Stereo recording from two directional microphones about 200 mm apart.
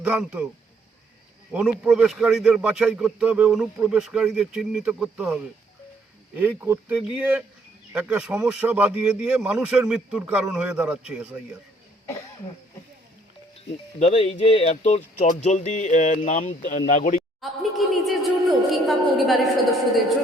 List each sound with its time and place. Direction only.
0.0 s speech: 5° right (ahead or behind)
1.5 s a man's voice: 5° right (ahead or behind)
14.0 s speech: 30° left (ahead or behind)
17.6 s a sound: centre (ahead or behind)